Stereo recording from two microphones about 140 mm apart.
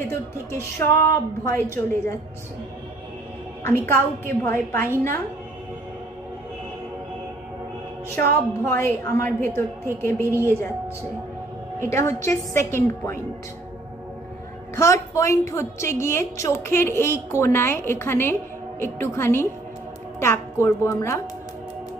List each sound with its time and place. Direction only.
0.1 s a woman's voice: 20° left (ahead or behind)
3.6 s a child's voice: 15° left (ahead or behind)
8.2 s a child's voice: 20° left (ahead or behind)
11.8 s a woman's voice: 20° left (ahead or behind)
14.8 s a woman's voice: 20° left (ahead or behind)